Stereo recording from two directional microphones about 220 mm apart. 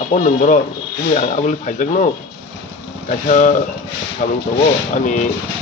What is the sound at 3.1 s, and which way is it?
Speech, 35° left (ahead or behind).